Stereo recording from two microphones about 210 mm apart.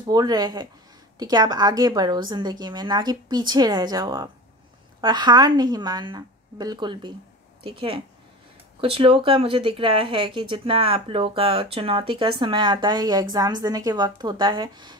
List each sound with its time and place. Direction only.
0.1 s speech: 20° right (ahead or behind)